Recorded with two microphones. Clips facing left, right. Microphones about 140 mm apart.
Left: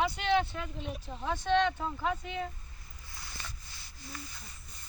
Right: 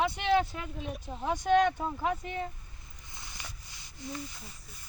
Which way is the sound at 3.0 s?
20° right (ahead or behind).